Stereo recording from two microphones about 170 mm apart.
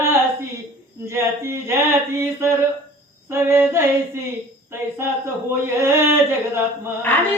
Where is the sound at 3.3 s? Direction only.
15° right (ahead or behind).